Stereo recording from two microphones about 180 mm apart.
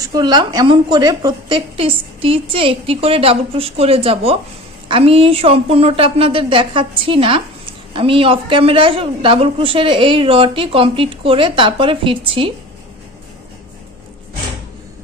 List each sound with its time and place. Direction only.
0.0 s a woman's voice: 25° right (ahead or behind)